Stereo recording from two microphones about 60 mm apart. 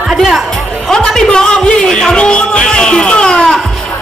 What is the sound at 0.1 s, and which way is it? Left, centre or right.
Music, centre.